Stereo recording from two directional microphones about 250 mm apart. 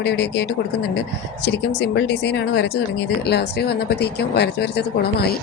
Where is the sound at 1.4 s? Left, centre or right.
Left.